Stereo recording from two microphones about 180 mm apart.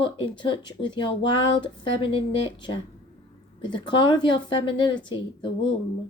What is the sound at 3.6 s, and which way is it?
A woman's voice, 25° left (ahead or behind).